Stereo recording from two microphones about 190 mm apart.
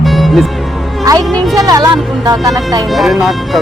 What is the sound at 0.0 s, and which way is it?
Music, centre (ahead or behind).